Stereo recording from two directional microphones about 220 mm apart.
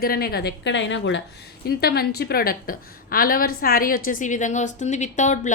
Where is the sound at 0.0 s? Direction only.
45° left (ahead or behind).